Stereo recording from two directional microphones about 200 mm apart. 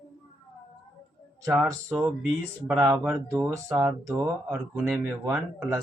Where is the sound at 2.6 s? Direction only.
5° right (ahead or behind).